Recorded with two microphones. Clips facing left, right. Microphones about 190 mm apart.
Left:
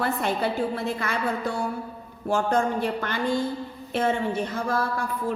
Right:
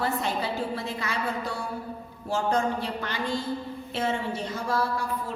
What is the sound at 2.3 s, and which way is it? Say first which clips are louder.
A woman's voice: left 3 dB; 55° left (ahead or behind).